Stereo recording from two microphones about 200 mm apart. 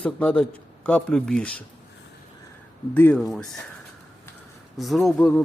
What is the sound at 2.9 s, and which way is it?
Speech, 10° left (ahead or behind).